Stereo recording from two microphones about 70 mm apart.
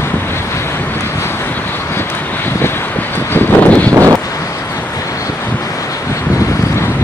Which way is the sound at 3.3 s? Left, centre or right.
Left.